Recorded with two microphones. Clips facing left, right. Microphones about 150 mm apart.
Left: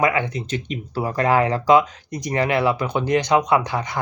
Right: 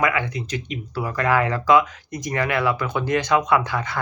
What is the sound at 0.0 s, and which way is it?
Speech, 25° left (ahead or behind).